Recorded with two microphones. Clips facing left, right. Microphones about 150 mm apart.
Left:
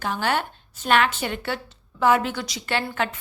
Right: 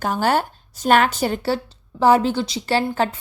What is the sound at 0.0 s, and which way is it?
Speech, 40° right (ahead or behind).